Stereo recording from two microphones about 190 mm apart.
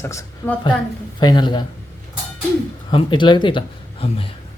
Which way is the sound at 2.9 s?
25° left (ahead or behind).